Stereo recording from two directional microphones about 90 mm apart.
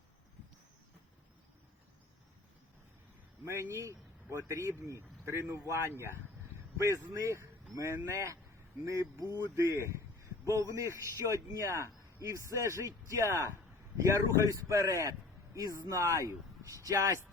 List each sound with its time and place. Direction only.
3.4 s a man's voice: 30° right (ahead or behind)